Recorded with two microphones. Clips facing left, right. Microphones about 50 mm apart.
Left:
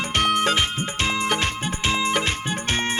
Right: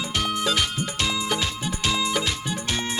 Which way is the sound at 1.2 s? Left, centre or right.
Left.